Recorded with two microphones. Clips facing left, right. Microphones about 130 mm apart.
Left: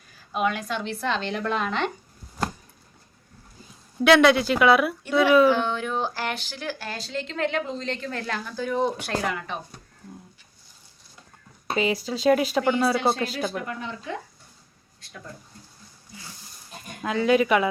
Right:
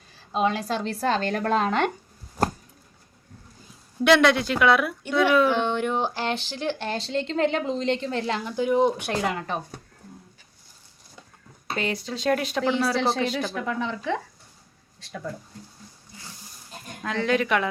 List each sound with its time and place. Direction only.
0.1 s a woman's voice: 30° right (ahead or behind)
4.0 s speech: centre (ahead or behind)
5.6 s speech: 20° right (ahead or behind)
9.3 s a woman's voice: 40° right (ahead or behind)
11.8 s speech: 5° left (ahead or behind)
13.7 s speech: 90° right
17.0 s speech: 5° left (ahead or behind)